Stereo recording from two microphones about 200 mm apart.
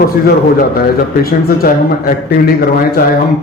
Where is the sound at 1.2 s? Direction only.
50° left (ahead or behind).